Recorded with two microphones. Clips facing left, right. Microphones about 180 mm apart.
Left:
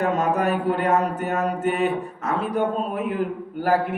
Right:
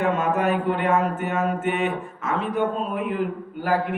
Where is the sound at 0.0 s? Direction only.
40° left (ahead or behind).